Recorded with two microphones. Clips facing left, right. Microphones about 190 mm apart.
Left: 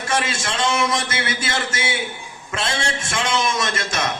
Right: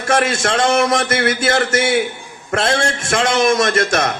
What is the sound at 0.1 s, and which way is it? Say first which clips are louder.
A man's voice: right 8 dB; 65° right (ahead or behind).